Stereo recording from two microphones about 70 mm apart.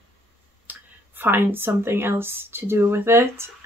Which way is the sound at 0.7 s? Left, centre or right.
Right.